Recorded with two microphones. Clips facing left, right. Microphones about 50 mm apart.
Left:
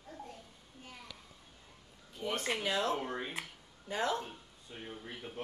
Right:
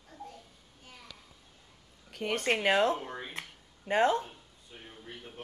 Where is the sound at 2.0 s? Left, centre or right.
Right.